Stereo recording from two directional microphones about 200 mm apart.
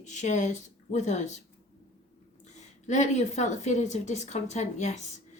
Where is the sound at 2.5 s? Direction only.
35° left (ahead or behind).